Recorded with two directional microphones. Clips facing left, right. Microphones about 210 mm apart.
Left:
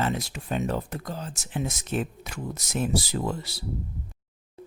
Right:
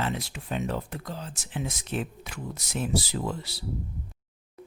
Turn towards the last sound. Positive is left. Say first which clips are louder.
# left 2 dB
turn(degrees=45)  # may be behind; listen again after turning